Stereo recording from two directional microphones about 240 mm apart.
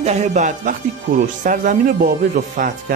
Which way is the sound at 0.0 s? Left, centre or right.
Right.